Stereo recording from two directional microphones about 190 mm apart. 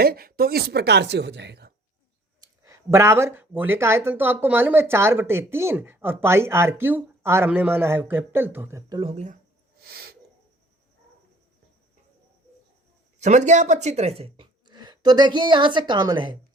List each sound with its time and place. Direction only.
0.0 s a woman's voice: 50° right (ahead or behind)
2.4 s speech: 15° right (ahead or behind)
8.9 s speech: 30° right (ahead or behind)
9.8 s a sound: 55° right (ahead or behind)
13.1 s speech: 40° right (ahead or behind)